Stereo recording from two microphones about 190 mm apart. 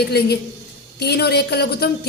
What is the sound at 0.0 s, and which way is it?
A woman's voice, 60° left (ahead or behind).